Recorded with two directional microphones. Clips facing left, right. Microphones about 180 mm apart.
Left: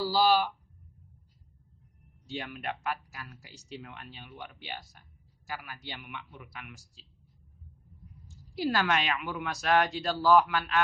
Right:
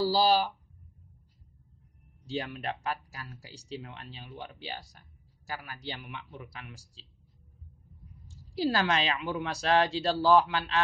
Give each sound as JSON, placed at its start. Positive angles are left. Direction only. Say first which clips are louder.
{"t": 0.0, "sound": "speech", "louder": "right 1 dB", "side_deg": -40}
{"t": 2.2, "sound": "speech", "louder": "right 3 dB", "side_deg": -35}
{"t": 8.5, "sound": "speech", "louder": "right 1 dB", "side_deg": -30}